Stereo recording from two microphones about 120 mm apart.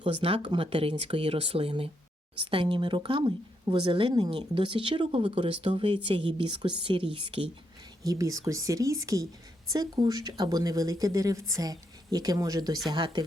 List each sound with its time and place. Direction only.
0.0 s speech: 50° right (ahead or behind)
8.0 s speech: 30° right (ahead or behind)